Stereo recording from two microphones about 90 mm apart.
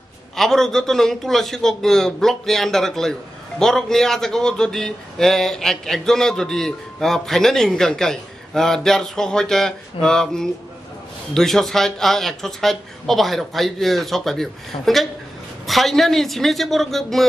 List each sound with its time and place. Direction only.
0.4 s a man's voice: 5° left (ahead or behind)